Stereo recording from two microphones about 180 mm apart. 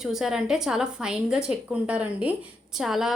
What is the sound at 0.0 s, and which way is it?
A woman's voice, centre (ahead or behind).